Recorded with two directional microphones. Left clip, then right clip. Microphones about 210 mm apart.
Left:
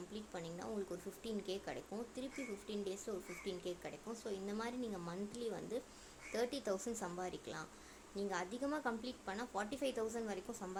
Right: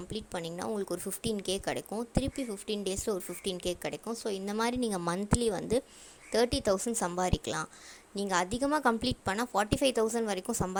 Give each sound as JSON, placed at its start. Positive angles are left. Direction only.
{"t": 0.1, "sound": "speech", "side_deg": -45}